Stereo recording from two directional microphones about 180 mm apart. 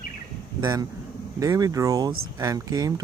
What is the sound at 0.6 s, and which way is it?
Speech, 20° right (ahead or behind).